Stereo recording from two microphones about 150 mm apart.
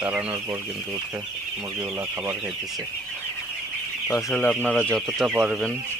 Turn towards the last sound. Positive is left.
turn(degrees=0)  # may be behind; listen again after turning